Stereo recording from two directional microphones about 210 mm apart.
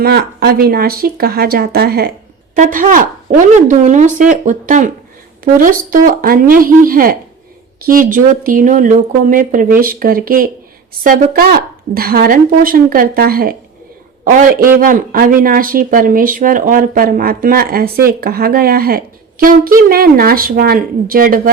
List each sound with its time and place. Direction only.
0.0 s speech: 50° right (ahead or behind)